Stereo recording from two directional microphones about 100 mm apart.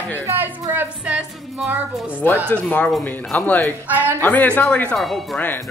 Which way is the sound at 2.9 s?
10° left (ahead or behind).